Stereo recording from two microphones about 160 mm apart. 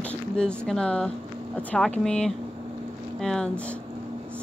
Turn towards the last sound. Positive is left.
turn(degrees=5)  # may be behind; listen again after turning